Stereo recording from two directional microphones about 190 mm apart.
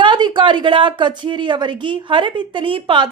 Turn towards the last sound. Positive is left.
turn(degrees=-25)  # may be behind; listen again after turning